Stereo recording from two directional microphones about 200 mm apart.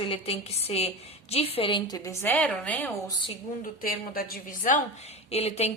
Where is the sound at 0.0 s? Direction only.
30° left (ahead or behind).